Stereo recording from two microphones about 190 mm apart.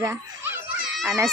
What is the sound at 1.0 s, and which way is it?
Speech, 15° right (ahead or behind).